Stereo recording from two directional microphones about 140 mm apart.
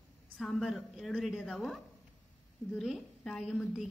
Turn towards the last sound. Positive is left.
turn(degrees=0)  # may be behind; listen again after turning